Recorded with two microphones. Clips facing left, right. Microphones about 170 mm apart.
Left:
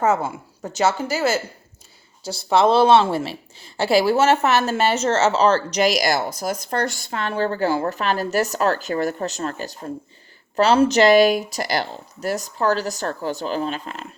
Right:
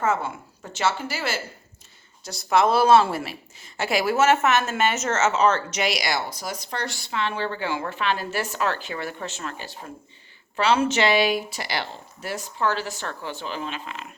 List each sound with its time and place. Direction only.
0.0 s a woman's voice: 40° left (ahead or behind)
2.2 s a woman's voice: 30° left (ahead or behind)